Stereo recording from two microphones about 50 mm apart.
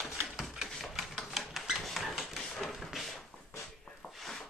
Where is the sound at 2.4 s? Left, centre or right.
Centre.